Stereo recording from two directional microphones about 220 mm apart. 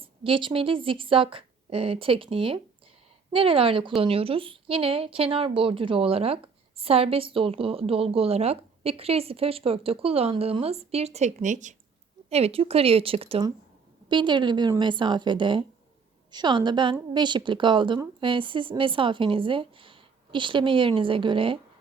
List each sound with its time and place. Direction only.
0.0 s a woman's voice: 25° right (ahead or behind)